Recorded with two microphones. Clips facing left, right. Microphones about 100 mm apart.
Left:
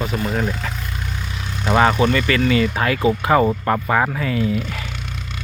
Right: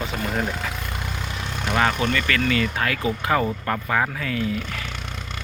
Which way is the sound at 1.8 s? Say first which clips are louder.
Left 6 dB; 15° left (ahead or behind).